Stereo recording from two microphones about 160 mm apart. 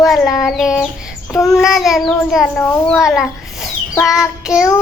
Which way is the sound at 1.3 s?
20° left (ahead or behind).